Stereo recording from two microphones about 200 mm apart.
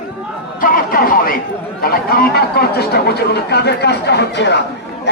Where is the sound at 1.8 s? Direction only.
50° left (ahead or behind).